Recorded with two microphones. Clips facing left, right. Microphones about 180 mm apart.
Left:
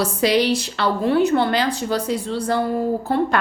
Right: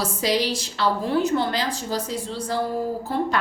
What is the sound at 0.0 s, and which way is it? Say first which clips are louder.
A woman's voice: left 5 dB; 65° left (ahead or behind).